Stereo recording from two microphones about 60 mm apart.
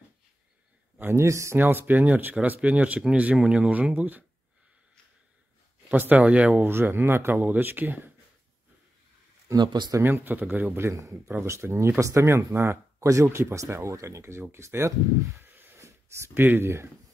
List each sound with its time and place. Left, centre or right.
1.1 s speech: right
1.6 s speech: right
5.9 s speech: right
6.6 s speech: right
9.5 s speech: right
10.0 s speech: right
11.0 s speech: right
15.4 s a sound: right
15.8 s a sound: right
16.3 s speech: right